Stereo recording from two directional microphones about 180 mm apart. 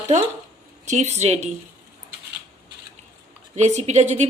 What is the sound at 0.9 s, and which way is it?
Speech, 40° right (ahead or behind).